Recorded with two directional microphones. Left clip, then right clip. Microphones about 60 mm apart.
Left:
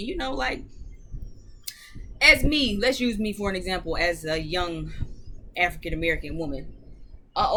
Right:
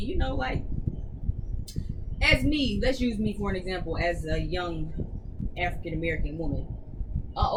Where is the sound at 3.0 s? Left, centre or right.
Left.